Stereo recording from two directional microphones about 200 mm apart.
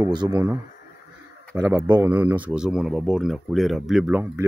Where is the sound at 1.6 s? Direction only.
10° right (ahead or behind).